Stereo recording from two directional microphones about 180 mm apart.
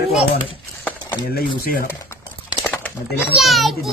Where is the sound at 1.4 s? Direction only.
55° left (ahead or behind).